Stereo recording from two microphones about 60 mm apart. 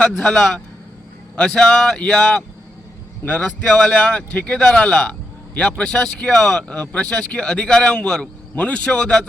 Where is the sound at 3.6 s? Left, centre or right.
Centre.